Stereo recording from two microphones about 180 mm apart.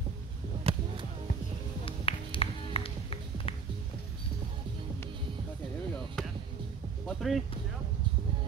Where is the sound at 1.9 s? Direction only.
30° left (ahead or behind).